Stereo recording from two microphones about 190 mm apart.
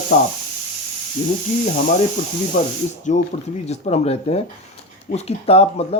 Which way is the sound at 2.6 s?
45° left (ahead or behind).